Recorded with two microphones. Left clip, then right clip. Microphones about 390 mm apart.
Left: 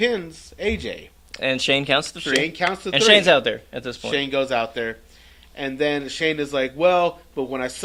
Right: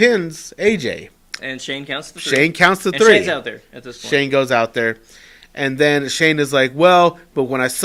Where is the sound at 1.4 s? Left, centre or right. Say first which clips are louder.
Left 7 dB; left.